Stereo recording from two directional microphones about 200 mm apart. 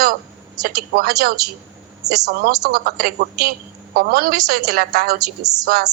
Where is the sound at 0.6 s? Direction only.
50° right (ahead or behind).